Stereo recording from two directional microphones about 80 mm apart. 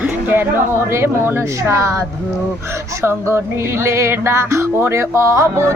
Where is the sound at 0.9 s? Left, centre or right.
Right.